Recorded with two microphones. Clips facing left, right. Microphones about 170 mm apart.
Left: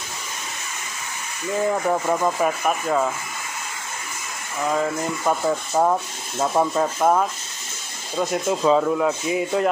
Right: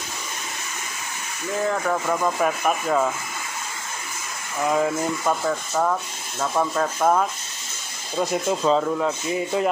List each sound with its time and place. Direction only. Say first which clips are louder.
1.7 s speech: left 2 dB; 15° left (ahead or behind)
2.4 s speech: even; centre (ahead or behind)
5.2 s speech: left 2 dB; 20° left (ahead or behind); by 9.7 s centre (ahead or behind)